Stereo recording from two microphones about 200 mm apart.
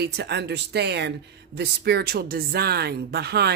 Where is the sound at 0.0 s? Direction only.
55° right (ahead or behind).